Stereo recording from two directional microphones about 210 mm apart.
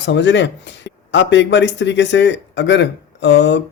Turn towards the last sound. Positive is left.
turn(degrees=55)  # may be behind; listen again after turning